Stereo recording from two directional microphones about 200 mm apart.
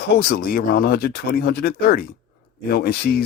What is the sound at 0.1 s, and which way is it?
Speech, 50° left (ahead or behind).